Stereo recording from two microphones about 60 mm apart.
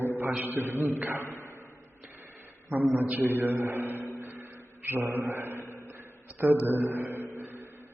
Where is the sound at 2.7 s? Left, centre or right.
Right.